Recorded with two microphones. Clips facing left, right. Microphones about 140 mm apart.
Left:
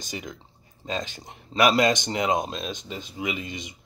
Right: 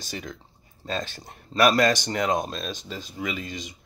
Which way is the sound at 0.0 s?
15° left (ahead or behind).